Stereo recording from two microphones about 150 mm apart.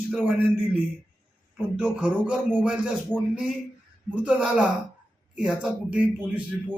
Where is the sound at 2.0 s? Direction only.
10° right (ahead or behind).